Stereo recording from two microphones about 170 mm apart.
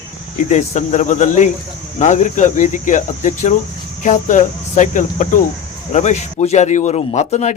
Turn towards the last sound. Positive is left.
turn(degrees=45)  # may be behind; listen again after turning